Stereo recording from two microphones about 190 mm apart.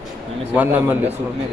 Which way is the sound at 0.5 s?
10° right (ahead or behind).